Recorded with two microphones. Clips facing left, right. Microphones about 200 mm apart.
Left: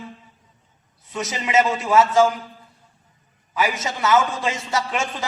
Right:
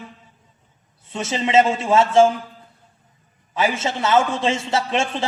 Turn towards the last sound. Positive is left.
turn(degrees=-30)  # may be behind; listen again after turning